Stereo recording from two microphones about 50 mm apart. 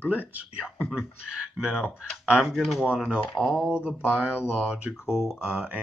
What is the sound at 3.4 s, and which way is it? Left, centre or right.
Speech, left.